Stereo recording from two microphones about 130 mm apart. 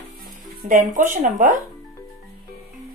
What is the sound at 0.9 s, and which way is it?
Speech, 85° right.